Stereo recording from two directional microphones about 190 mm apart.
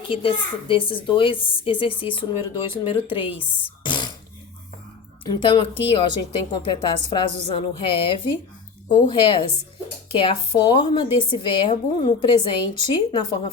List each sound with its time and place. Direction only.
0.1 s speech: 25° left (ahead or behind)
3.8 s throat clearing: 25° left (ahead or behind)
5.2 s speech: 25° left (ahead or behind)